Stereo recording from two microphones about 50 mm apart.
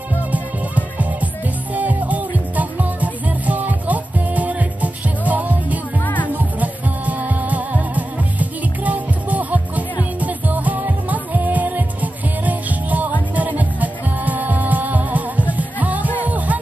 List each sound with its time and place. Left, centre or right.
0.3 s music: right
6.0 s music: left
6.3 s music: right